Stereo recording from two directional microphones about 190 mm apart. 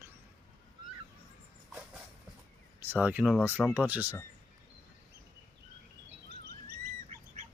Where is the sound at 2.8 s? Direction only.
10° right (ahead or behind).